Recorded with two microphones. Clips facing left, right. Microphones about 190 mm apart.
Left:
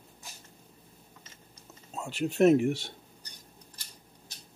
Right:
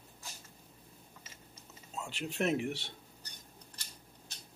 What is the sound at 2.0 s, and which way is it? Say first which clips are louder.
Speech: left 11 dB; 45° left (ahead or behind).